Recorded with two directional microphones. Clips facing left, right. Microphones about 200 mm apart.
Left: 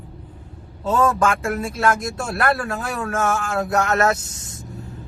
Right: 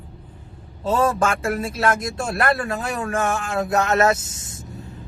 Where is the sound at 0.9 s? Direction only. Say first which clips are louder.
Left 1 dB; 25° right (ahead or behind).